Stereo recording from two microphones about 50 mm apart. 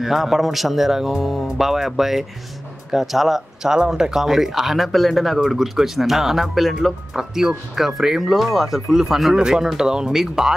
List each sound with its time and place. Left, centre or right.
0.0 s speech: centre